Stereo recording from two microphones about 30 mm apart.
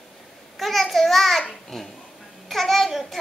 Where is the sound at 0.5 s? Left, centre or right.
Centre.